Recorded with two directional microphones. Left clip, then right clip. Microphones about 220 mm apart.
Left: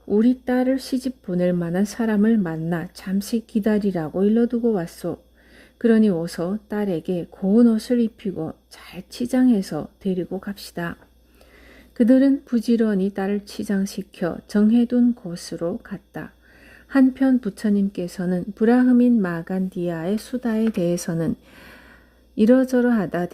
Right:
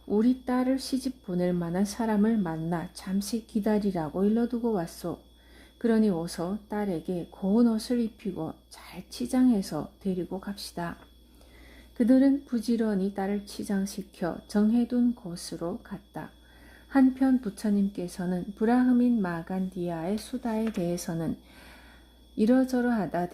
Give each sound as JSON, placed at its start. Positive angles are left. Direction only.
{"t": 0.1, "sound": "speech", "side_deg": 35}
{"t": 11.9, "sound": "a woman's voice", "side_deg": 40}